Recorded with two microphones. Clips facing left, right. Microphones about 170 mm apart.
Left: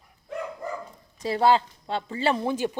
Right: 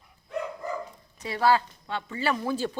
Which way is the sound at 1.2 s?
25° left (ahead or behind).